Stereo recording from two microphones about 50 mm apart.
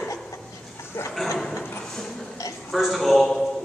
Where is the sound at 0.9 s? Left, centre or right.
Left.